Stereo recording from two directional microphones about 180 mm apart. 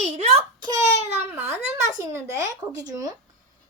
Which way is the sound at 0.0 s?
35° right (ahead or behind).